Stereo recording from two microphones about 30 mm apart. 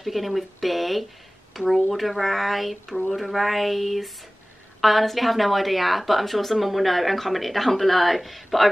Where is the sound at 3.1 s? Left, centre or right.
Centre.